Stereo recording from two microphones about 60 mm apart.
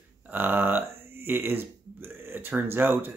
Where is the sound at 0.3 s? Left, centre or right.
Right.